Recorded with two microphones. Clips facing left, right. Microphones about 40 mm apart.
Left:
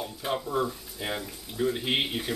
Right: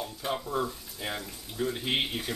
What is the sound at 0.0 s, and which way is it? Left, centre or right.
Speech, centre.